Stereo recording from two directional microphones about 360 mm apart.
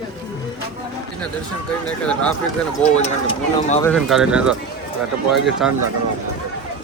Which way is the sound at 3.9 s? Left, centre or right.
Centre.